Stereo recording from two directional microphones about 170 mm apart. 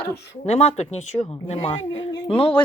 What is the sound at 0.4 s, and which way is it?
Speech, 35° left (ahead or behind).